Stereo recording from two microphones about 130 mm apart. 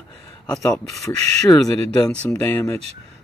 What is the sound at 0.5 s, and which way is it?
Speech, 5° left (ahead or behind).